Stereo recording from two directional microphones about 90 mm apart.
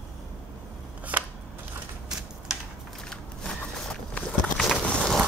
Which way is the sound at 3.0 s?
10° left (ahead or behind).